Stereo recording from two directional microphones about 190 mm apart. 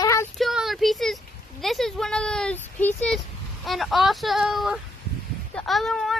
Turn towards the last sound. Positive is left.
turn(degrees=0)  # may be behind; listen again after turning